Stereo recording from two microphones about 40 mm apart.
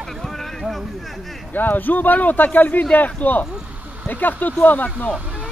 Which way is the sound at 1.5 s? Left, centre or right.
Left.